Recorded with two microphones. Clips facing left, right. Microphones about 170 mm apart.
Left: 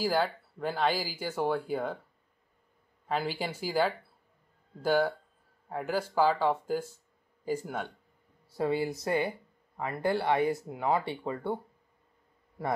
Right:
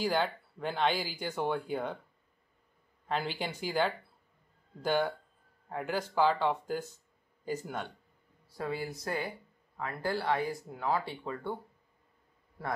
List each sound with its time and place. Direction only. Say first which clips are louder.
0.0 s speech: left 2 dB; 5° left (ahead or behind)
3.1 s speech: left 2 dB; 5° left (ahead or behind)
8.5 s speech: left 7 dB; 25° left (ahead or behind)